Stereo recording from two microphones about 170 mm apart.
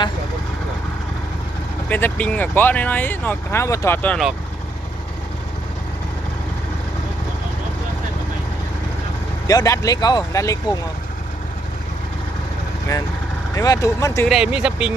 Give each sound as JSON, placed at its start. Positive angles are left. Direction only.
{"t": 1.9, "sound": "speech", "side_deg": 10}
{"t": 9.5, "sound": "speech", "side_deg": 20}
{"t": 13.6, "sound": "speech", "side_deg": 20}
{"t": 14.3, "sound": "speech", "side_deg": -5}